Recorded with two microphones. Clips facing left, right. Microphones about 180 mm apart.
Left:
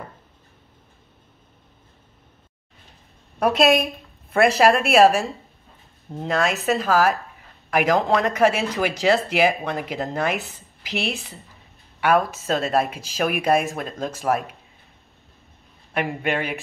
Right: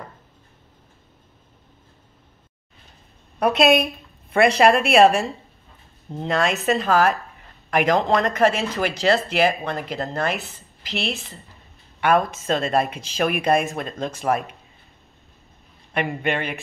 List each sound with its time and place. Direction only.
3.3 s a woman's voice: centre (ahead or behind)
8.9 s a woman's voice: 15° left (ahead or behind)
9.8 s a woman's voice: centre (ahead or behind)
10.0 s a woman's voice: 15° left (ahead or behind)
11.1 s a woman's voice: centre (ahead or behind)
15.9 s a woman's voice: 5° left (ahead or behind)